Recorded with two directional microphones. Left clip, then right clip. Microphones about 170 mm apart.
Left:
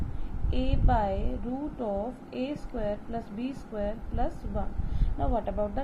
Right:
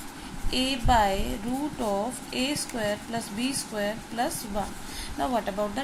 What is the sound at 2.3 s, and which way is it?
Speech, 20° right (ahead or behind).